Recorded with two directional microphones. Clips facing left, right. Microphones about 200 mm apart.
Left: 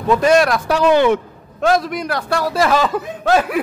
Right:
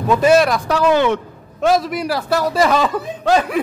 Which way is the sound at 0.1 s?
5° right (ahead or behind).